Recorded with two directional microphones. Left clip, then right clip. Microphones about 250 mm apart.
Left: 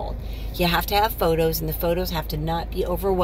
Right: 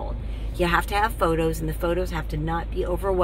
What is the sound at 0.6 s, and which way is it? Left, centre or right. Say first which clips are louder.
Speech: left 1 dB; centre.